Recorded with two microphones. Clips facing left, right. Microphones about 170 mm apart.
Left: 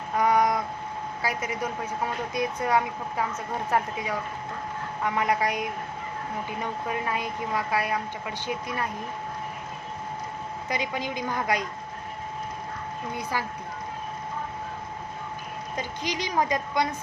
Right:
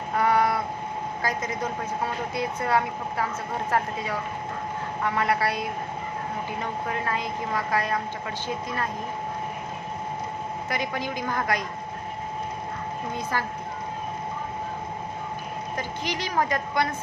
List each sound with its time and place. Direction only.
0.2 s a sound: 15° left (ahead or behind)
1.2 s a woman's voice: 10° left (ahead or behind)
10.7 s a woman's voice: 15° left (ahead or behind)
13.3 s a woman's voice: 10° left (ahead or behind)
15.7 s a woman's voice: 15° left (ahead or behind)